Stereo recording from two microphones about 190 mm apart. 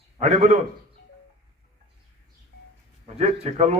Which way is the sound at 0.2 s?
35° right (ahead or behind).